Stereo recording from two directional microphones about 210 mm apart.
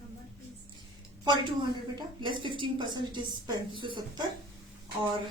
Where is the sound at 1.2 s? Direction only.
20° right (ahead or behind).